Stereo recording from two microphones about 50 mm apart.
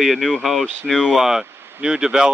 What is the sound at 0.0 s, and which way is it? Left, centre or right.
Speech, centre.